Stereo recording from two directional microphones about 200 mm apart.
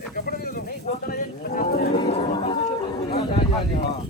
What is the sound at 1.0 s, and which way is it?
Speech, 45° left (ahead or behind).